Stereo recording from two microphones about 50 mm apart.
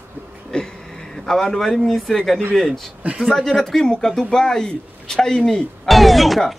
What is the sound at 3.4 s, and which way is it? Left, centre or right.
A man's voice, centre.